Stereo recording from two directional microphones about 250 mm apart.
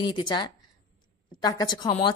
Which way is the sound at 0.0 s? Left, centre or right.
Centre.